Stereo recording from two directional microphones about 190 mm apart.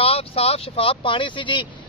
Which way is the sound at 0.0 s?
30° left (ahead or behind).